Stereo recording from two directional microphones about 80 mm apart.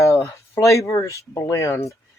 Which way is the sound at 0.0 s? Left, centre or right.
Left.